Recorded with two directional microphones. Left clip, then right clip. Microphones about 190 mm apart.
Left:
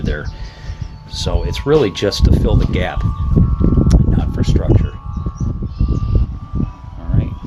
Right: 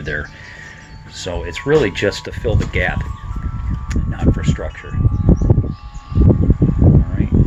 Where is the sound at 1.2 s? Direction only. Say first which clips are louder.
Left 2 dB; 15° left (ahead or behind).